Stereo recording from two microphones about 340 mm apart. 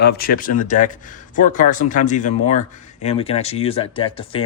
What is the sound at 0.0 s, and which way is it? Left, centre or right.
A man's voice, left.